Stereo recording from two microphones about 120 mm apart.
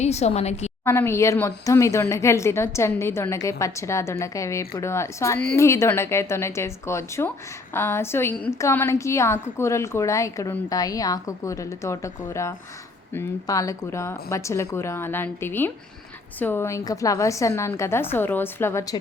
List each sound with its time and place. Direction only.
0.0 s a woman's voice: 65° left (ahead or behind)
0.9 s speech: 20° left (ahead or behind)